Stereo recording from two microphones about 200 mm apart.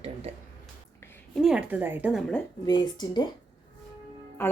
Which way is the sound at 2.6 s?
20° left (ahead or behind).